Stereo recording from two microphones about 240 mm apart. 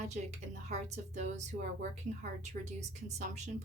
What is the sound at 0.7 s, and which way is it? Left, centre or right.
Speech, right.